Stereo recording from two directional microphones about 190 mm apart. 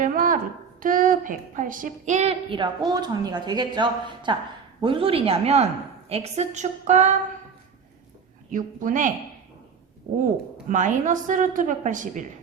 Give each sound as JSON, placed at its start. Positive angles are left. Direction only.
{"t": 0.0, "sound": "a sound", "side_deg": -45}
{"t": 0.8, "sound": "a woman's voice", "side_deg": -45}
{"t": 8.5, "sound": "a woman's voice", "side_deg": -45}
{"t": 10.7, "sound": "a woman's voice", "side_deg": -40}